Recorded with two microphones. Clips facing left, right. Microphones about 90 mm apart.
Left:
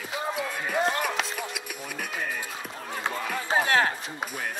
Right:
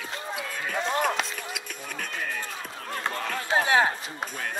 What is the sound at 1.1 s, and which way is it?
Music, 5° left (ahead or behind).